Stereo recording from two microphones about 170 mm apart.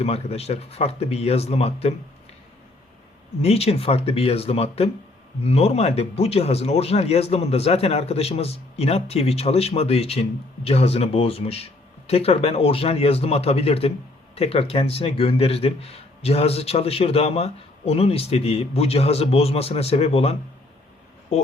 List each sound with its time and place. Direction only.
0.0 s speech: 35° left (ahead or behind)
3.4 s speech: 35° left (ahead or behind)